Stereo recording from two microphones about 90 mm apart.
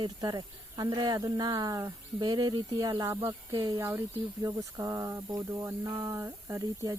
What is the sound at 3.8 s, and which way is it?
Speech, 30° right (ahead or behind).